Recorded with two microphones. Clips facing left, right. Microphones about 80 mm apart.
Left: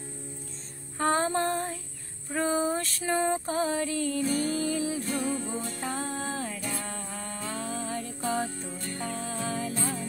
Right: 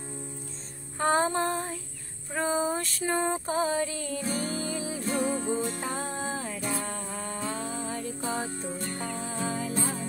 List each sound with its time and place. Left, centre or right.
0.9 s music: centre
5.0 s music: right; by 8.5 s centre
8.6 s music: right
9.0 s music: centre
9.8 s music: right